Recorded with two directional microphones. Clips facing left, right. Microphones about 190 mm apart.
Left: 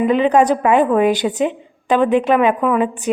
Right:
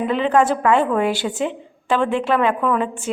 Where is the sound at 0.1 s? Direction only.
20° left (ahead or behind).